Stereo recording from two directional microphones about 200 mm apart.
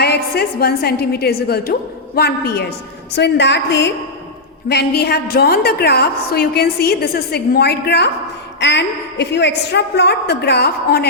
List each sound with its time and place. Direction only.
0.0 s a woman's voice: 50° left (ahead or behind)